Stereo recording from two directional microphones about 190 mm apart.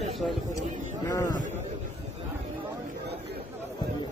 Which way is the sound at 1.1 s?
20° left (ahead or behind).